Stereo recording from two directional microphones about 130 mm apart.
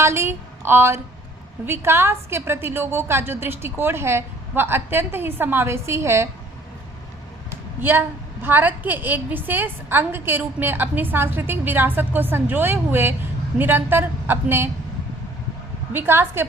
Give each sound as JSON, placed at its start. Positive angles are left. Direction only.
{"t": 0.0, "sound": "a woman's voice", "side_deg": -20}
{"t": 7.5, "sound": "a woman's voice", "side_deg": -15}
{"t": 15.9, "sound": "a woman's voice", "side_deg": -15}